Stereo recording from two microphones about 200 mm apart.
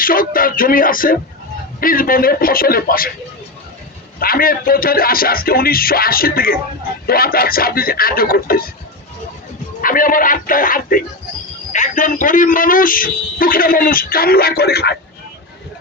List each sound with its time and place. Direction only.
0.0 s speech: 45° left (ahead or behind)
4.2 s speech: 45° left (ahead or behind)
9.8 s speech: 45° left (ahead or behind)